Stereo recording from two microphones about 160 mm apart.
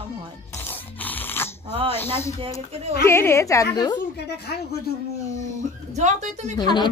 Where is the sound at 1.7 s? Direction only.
35° right (ahead or behind).